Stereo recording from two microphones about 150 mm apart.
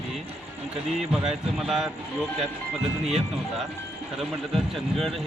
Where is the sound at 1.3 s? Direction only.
Centre (ahead or behind).